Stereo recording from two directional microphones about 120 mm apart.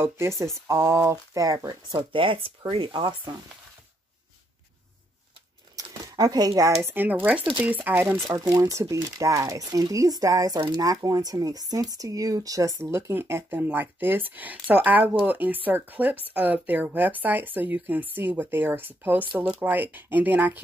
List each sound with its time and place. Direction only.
0.0 s speech: 20° right (ahead or behind)
2.0 s speech: 45° right (ahead or behind)
5.8 s a sound: 30° right (ahead or behind)
6.8 s speech: 15° right (ahead or behind)
8.3 s speech: 30° right (ahead or behind)